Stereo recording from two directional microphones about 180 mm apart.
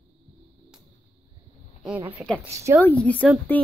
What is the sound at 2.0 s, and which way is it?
Speech, 10° right (ahead or behind).